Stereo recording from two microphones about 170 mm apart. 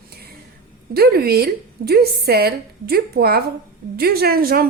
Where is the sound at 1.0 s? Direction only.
65° right (ahead or behind).